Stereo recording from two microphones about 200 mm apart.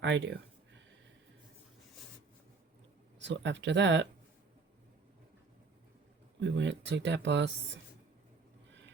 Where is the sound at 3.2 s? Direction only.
65° right (ahead or behind).